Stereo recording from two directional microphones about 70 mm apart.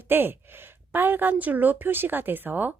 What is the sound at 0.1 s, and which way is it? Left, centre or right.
A woman's voice, right.